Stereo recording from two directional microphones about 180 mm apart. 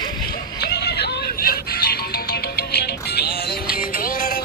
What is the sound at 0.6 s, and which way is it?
Music, 65° left (ahead or behind).